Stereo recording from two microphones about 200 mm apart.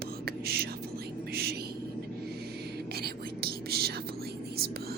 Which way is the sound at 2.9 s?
50° right (ahead or behind).